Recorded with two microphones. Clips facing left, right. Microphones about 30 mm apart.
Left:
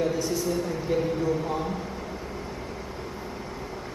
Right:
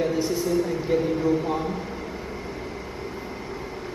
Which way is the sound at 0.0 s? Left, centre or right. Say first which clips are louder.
Right 2 dB; centre.